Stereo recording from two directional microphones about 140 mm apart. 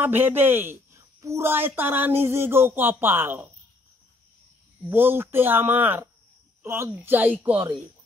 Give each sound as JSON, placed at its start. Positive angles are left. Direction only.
{"t": 0.0, "sound": "speech", "side_deg": -15}
{"t": 4.8, "sound": "speech", "side_deg": -15}